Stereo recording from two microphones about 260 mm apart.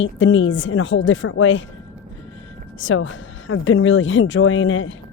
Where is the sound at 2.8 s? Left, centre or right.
Left.